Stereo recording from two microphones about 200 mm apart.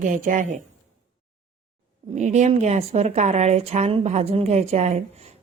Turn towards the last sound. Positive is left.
turn(degrees=-30)  # may be behind; listen again after turning